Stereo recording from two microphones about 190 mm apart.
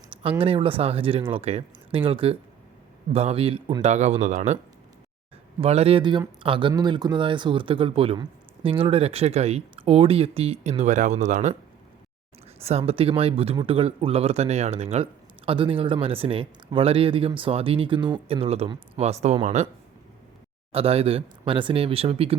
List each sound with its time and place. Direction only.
0.2 s speech: 30° right (ahead or behind)
12.5 s speech: 30° right (ahead or behind)
20.7 s speech: 30° right (ahead or behind)